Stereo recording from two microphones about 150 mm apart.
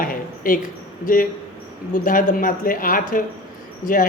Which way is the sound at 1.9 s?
65° left (ahead or behind).